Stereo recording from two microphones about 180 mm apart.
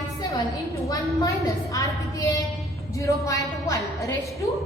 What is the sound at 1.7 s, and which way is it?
Speech, 20° left (ahead or behind).